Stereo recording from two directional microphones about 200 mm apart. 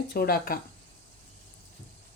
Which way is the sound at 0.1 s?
50° left (ahead or behind).